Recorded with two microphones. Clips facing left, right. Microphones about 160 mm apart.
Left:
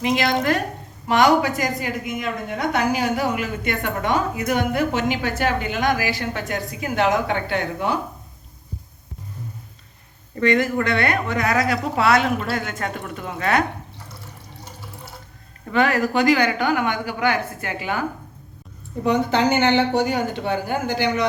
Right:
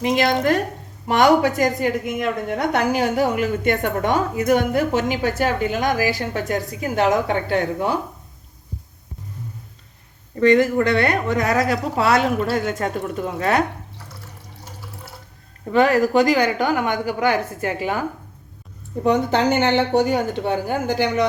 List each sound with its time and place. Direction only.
0.0 s a woman's voice: 45° right (ahead or behind)
10.4 s a woman's voice: 30° right (ahead or behind)
14.6 s water: 5° right (ahead or behind)
15.7 s a woman's voice: 35° right (ahead or behind)
19.0 s a woman's voice: 50° right (ahead or behind)